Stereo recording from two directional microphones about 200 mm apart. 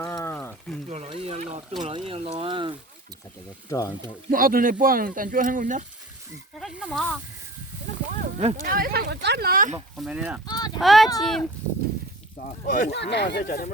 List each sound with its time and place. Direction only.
0.0 s a sound: 15° left (ahead or behind)
0.3 s a sound: 5° left (ahead or behind)
0.9 s a sound: 30° right (ahead or behind)
1.8 s speech: 25° right (ahead or behind)
3.7 s speech: 15° left (ahead or behind)
4.3 s speech: 45° right (ahead or behind)
6.6 s speech: centre (ahead or behind)
8.4 s speech: 40° right (ahead or behind)
10.0 s speech: 5° right (ahead or behind)
10.4 s speech: 20° left (ahead or behind)
10.8 s speech: centre (ahead or behind)
12.6 s speech: 40° left (ahead or behind)
12.9 s speech: 60° left (ahead or behind)